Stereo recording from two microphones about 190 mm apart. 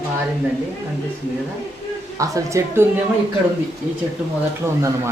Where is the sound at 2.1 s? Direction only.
15° right (ahead or behind).